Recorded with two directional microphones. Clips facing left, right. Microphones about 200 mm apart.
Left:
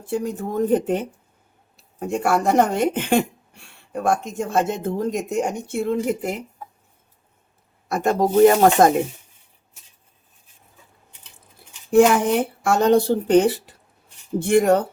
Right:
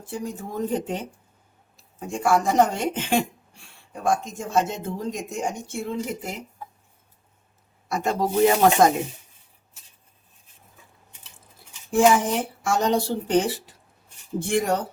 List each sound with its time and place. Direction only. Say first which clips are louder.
0.0 s speech: left 7 dB; 65° left (ahead or behind)
7.9 s speech: left 5 dB; 55° left (ahead or behind)
11.9 s speech: left 4 dB; 60° left (ahead or behind)